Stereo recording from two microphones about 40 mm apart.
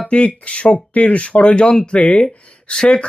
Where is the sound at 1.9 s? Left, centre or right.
Left.